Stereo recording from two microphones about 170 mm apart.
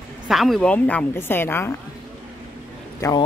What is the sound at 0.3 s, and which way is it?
A woman's voice, centre (ahead or behind).